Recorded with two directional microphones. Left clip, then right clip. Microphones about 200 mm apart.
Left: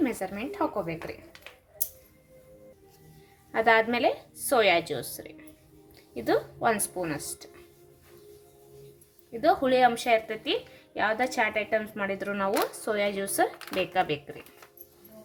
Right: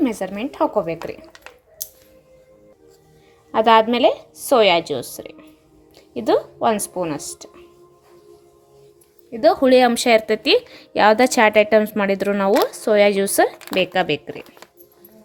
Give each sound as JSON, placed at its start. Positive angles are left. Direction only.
{"t": 0.0, "sound": "speech", "side_deg": -35}
{"t": 3.5, "sound": "a woman's voice", "side_deg": -30}
{"t": 9.4, "sound": "speech", "side_deg": -40}